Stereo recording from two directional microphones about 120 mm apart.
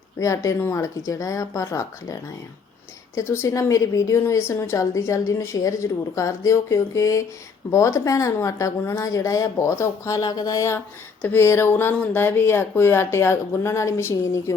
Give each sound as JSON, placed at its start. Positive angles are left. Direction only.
{"t": 0.2, "sound": "a woman's voice", "side_deg": 25}
{"t": 3.2, "sound": "a woman's voice", "side_deg": 25}